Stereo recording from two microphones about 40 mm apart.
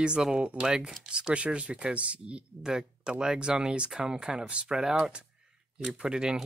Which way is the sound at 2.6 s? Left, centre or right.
Right.